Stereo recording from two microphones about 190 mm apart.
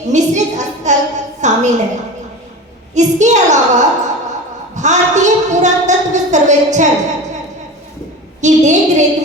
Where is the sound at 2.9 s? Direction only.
40° right (ahead or behind).